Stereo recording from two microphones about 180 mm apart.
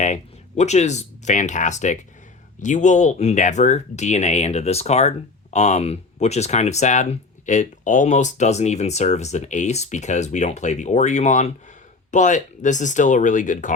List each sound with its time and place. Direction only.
0.0 s speech: 40° left (ahead or behind)